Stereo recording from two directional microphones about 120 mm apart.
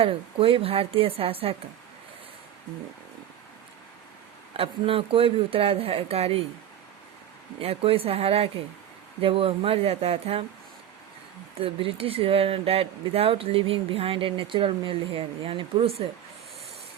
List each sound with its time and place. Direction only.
0.0 s speech: 50° right (ahead or behind)
4.5 s speech: 50° right (ahead or behind)
7.6 s speech: 50° right (ahead or behind)
11.5 s speech: 50° right (ahead or behind)